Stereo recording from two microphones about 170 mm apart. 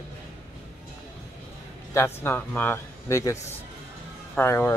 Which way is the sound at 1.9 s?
15° left (ahead or behind).